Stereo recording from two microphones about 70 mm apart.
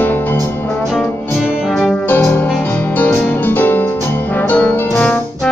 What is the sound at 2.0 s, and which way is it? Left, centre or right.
Music, left.